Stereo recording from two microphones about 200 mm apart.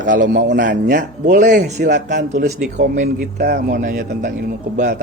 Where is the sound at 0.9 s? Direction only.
40° right (ahead or behind).